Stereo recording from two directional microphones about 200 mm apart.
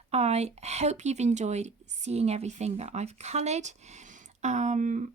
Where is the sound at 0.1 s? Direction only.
30° right (ahead or behind).